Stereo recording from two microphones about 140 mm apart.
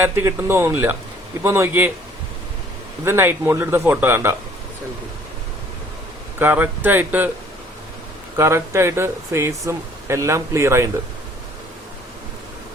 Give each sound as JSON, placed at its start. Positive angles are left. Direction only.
{"t": 0.0, "sound": "speech", "side_deg": -20}
{"t": 3.0, "sound": "speech", "side_deg": -20}
{"t": 6.4, "sound": "speech", "side_deg": -15}
{"t": 8.4, "sound": "speech", "side_deg": -20}